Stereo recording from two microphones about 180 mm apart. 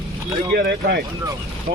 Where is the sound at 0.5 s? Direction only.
60° right (ahead or behind).